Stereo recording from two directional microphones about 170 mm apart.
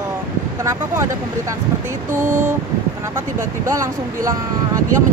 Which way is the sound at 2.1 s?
15° right (ahead or behind).